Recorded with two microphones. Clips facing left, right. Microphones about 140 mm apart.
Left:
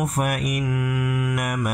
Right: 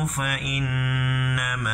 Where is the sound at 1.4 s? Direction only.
40° left (ahead or behind).